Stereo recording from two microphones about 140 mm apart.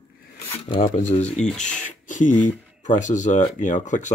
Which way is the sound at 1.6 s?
65° left (ahead or behind).